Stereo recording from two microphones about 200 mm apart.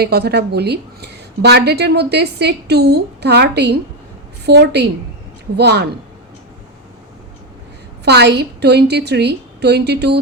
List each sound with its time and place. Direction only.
0.0 s a woman's voice: 55° right (ahead or behind)
8.0 s a woman's voice: 55° right (ahead or behind)